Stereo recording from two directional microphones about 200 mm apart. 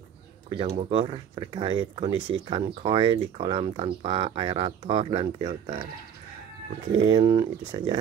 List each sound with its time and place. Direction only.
0.6 s speech: 30° right (ahead or behind)
7.1 s speech: 25° right (ahead or behind)